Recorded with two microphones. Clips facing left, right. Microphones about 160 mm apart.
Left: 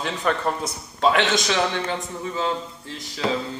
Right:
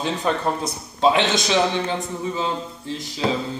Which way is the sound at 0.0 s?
25° right (ahead or behind).